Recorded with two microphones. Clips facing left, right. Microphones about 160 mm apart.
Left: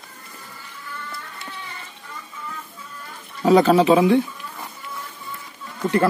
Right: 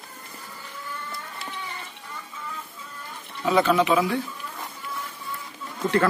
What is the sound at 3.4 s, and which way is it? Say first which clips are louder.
Speech: left 6 dB; 35° left (ahead or behind).